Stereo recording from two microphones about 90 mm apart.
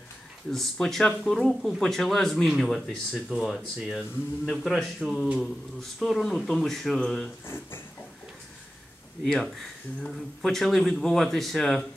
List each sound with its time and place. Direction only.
0.5 s speech: 5° left (ahead or behind)
3.3 s speech: 5° right (ahead or behind)
7.4 s speech: 25° left (ahead or behind)
9.2 s speech: 5° left (ahead or behind)